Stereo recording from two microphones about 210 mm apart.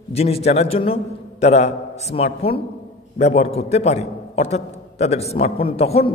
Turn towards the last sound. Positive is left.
turn(degrees=30)  # may be behind; listen again after turning